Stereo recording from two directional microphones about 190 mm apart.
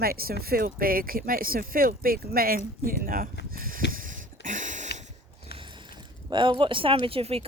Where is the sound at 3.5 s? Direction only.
50° right (ahead or behind).